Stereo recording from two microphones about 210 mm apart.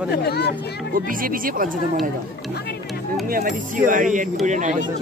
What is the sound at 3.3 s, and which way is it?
Speech, 40° right (ahead or behind).